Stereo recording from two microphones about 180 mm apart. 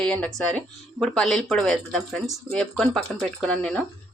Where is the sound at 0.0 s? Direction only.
5° left (ahead or behind).